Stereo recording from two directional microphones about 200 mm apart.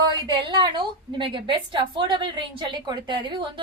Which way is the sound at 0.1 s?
20° right (ahead or behind).